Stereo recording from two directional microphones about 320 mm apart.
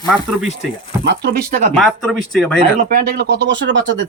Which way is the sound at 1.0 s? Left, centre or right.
Right.